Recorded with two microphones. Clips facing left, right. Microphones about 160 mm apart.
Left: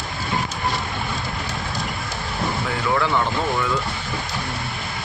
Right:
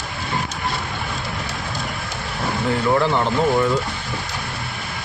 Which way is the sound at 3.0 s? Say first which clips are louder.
Right 3 dB; 30° right (ahead or behind).